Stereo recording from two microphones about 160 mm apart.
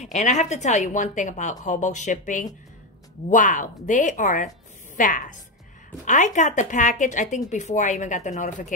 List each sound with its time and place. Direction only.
0.0 s a woman's voice: 45° left (ahead or behind)